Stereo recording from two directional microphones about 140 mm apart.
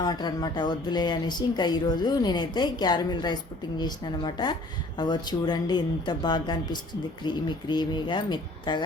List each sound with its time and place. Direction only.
0.0 s speech: 30° left (ahead or behind)